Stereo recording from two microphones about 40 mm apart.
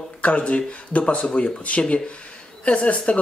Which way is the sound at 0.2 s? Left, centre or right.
Left.